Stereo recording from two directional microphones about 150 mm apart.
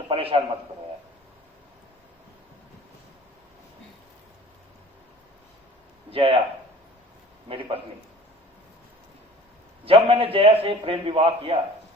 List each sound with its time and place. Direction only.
0.1 s a man's voice: 40° right (ahead or behind)
6.1 s a man's voice: 40° right (ahead or behind)
7.4 s a man's voice: 35° right (ahead or behind)
9.8 s a man's voice: 40° right (ahead or behind)